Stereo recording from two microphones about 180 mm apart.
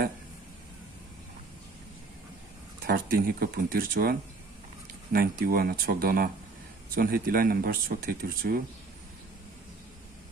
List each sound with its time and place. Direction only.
2.8 s speech: 55° right (ahead or behind)